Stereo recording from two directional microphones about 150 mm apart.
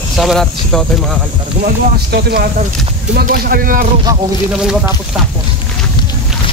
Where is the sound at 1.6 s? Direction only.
90° right.